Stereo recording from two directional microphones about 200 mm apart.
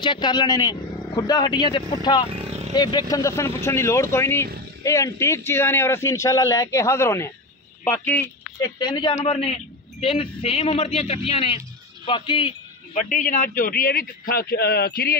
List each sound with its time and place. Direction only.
0.0 s a man's voice: 20° left (ahead or behind)
12.9 s a man's voice: 40° left (ahead or behind)